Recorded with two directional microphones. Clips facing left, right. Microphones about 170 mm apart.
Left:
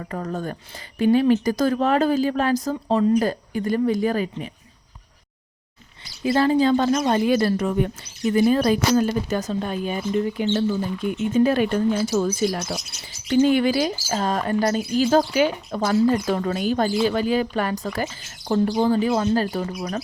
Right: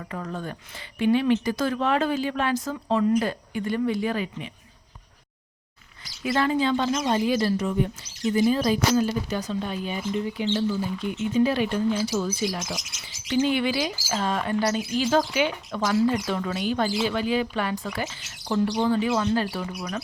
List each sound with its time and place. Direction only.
0.0 s speech: 40° left (ahead or behind)
6.2 s speech: 30° left (ahead or behind)